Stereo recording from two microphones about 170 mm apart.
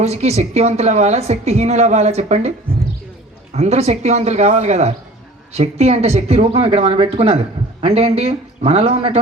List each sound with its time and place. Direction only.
0.0 s speech: 40° right (ahead or behind)
3.5 s speech: 40° right (ahead or behind)